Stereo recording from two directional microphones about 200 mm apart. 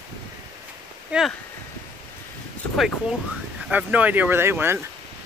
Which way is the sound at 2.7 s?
Centre (ahead or behind).